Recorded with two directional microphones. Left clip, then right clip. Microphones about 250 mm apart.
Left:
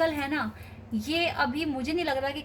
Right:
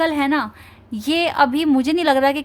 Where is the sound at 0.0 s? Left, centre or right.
Right.